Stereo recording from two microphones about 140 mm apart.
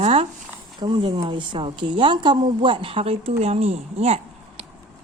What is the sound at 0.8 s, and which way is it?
Speech, 35° right (ahead or behind).